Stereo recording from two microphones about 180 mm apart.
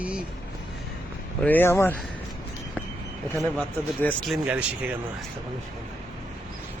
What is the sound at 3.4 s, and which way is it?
Speech, 10° left (ahead or behind).